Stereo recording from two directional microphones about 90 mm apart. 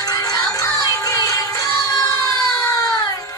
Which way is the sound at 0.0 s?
45° left (ahead or behind).